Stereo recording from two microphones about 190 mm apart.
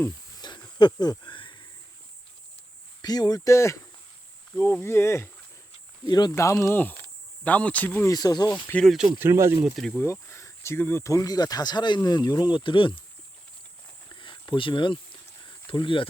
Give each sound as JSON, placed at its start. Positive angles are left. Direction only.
{"t": 0.0, "sound": "cricket", "side_deg": 20}
{"t": 3.0, "sound": "speech", "side_deg": 20}
{"t": 8.5, "sound": "speech", "side_deg": 10}
{"t": 9.1, "sound": "speech", "side_deg": -15}
{"t": 9.7, "sound": "speech", "side_deg": 0}
{"t": 10.0, "sound": "speech", "side_deg": 15}
{"t": 14.1, "sound": "cricket", "side_deg": 25}